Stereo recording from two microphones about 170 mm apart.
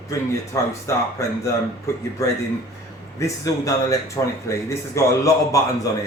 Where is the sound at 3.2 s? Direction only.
20° left (ahead or behind).